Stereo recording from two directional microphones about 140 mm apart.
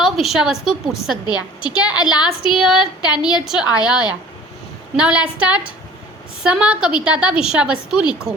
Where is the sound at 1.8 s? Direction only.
5° right (ahead or behind).